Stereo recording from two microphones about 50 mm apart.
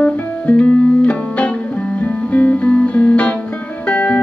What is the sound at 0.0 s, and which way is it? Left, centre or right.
Music, left.